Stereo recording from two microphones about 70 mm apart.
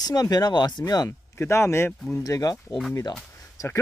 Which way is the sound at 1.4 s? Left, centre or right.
Left.